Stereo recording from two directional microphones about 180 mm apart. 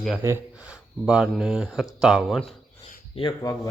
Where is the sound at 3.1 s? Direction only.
20° left (ahead or behind).